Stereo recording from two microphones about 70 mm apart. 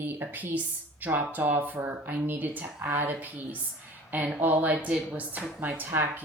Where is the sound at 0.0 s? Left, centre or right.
Right.